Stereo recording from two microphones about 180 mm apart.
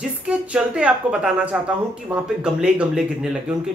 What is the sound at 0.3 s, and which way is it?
A woman's voice, 5° right (ahead or behind).